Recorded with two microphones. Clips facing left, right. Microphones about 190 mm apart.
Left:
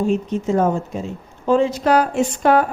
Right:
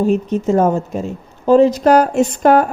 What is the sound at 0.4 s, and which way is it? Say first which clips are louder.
A woman's voice: right 4 dB; 45° right (ahead or behind).